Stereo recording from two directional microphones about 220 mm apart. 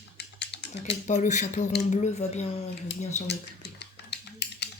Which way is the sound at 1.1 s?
35° left (ahead or behind).